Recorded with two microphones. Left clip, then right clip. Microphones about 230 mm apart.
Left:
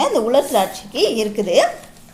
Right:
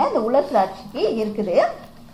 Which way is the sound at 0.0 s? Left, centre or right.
Left.